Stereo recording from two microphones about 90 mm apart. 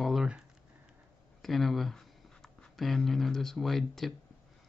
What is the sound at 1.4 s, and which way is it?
Speech, centre (ahead or behind).